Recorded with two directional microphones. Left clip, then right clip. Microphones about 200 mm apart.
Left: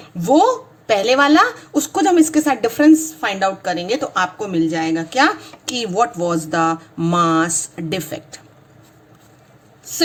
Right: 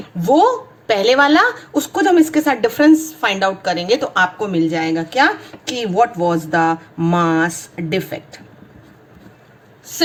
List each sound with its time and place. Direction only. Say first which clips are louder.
0.2 s a woman's voice: right 1 dB; 30° left (ahead or behind)